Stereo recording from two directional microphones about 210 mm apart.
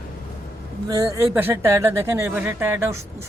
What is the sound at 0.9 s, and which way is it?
Speech, 15° right (ahead or behind).